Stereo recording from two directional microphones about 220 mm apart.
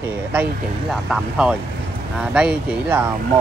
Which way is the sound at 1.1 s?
5° right (ahead or behind).